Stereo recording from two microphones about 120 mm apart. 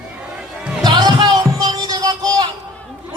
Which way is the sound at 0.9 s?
35° right (ahead or behind).